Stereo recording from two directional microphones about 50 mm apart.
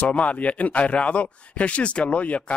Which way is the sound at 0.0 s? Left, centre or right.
Left.